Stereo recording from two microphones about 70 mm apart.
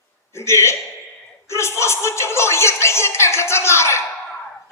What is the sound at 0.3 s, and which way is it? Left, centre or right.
Speech, left.